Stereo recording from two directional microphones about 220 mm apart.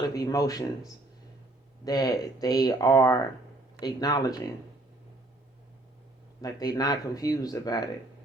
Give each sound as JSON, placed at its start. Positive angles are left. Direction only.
{"t": 0.1, "sound": "speech", "side_deg": 15}
{"t": 1.8, "sound": "speech", "side_deg": 15}
{"t": 6.4, "sound": "speech", "side_deg": 15}